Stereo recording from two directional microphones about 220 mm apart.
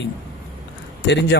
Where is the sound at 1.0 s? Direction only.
50° left (ahead or behind).